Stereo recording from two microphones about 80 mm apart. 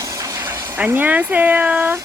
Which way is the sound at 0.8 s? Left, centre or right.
Right.